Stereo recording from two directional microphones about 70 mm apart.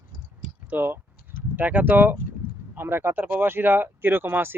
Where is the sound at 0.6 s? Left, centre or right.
Right.